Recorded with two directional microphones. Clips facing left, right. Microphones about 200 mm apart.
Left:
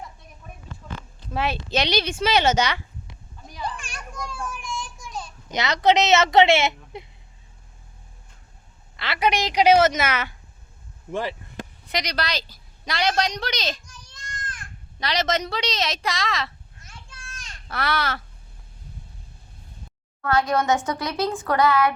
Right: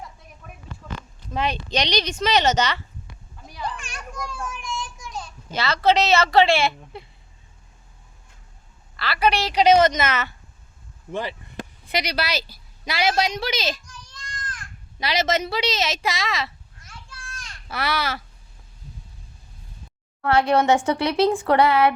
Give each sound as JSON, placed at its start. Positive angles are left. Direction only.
{"t": 1.3, "sound": "a woman's voice", "side_deg": 5}
{"t": 4.1, "sound": "children playing", "side_deg": 5}
{"t": 5.5, "sound": "speech", "side_deg": 20}
{"t": 9.0, "sound": "a woman's voice", "side_deg": 20}
{"t": 11.9, "sound": "a woman's voice", "side_deg": -5}
{"t": 14.1, "sound": "a sound", "side_deg": 25}
{"t": 14.9, "sound": "a woman's voice", "side_deg": -5}
{"t": 16.8, "sound": "children playing", "side_deg": 20}
{"t": 17.7, "sound": "a woman's voice", "side_deg": -5}
{"t": 20.2, "sound": "a woman's voice", "side_deg": -30}